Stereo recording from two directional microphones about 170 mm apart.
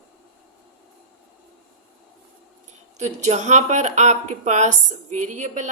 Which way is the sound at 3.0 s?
45° right (ahead or behind).